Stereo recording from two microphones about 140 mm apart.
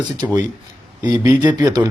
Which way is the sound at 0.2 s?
20° right (ahead or behind).